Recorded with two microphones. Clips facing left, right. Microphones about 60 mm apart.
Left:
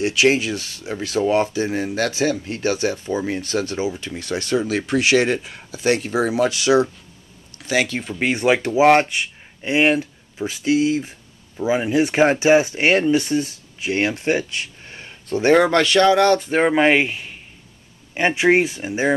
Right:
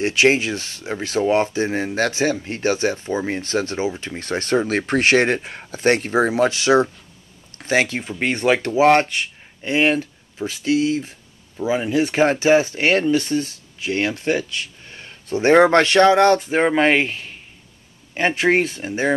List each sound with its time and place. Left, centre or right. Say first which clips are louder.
0.0 s speech: right 1 dB; right
7.5 s a sound: right 2 dB; right
8.0 s speech: left 1 dB; centre
15.4 s speech: right 2 dB; right
16.3 s speech: even; centre